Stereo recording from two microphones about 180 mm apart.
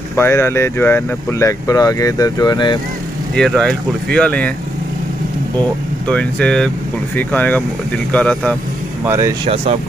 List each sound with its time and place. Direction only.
0.1 s speech: 15° left (ahead or behind)
3.3 s speech: centre (ahead or behind)
6.0 s speech: 5° left (ahead or behind)
9.0 s speech: 15° right (ahead or behind)